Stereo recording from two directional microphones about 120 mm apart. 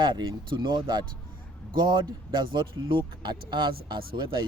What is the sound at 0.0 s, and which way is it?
Speech, 40° right (ahead or behind).